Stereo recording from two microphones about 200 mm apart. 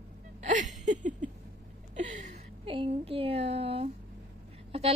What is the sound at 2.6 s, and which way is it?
A woman's voice, 25° right (ahead or behind).